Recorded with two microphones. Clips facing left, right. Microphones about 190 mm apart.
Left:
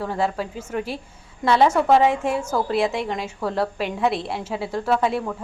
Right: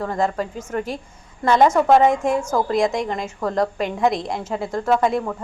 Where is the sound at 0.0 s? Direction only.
10° left (ahead or behind).